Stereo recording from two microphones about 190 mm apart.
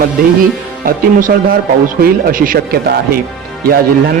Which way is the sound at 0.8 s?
50° right (ahead or behind).